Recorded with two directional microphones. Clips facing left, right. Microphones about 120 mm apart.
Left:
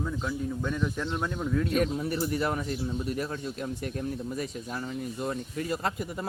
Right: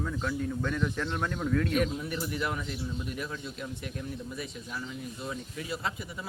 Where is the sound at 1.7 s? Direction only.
35° left (ahead or behind).